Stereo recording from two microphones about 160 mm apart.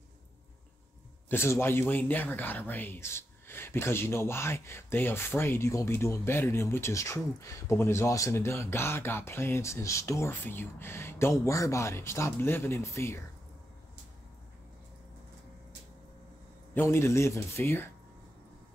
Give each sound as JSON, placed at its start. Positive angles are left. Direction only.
{"t": 1.3, "sound": "speech", "side_deg": 15}
{"t": 16.7, "sound": "speech", "side_deg": 15}